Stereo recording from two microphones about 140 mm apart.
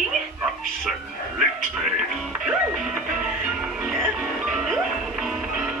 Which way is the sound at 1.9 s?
5° right (ahead or behind).